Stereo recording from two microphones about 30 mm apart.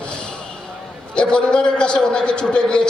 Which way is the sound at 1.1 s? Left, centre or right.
Left.